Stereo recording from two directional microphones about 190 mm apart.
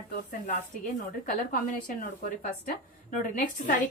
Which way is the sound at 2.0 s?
50° left (ahead or behind).